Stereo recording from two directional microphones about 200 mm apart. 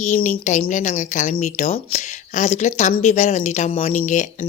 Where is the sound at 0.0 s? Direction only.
35° left (ahead or behind).